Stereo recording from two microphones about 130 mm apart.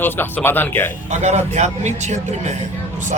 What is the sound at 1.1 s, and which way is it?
A man's voice, 60° right (ahead or behind).